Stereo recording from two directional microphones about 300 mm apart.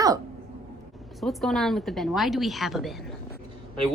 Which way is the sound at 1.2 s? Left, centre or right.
Centre.